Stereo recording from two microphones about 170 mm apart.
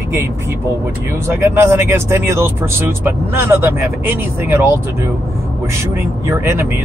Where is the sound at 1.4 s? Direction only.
15° right (ahead or behind).